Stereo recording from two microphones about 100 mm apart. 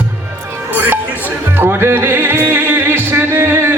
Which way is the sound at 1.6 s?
25° right (ahead or behind).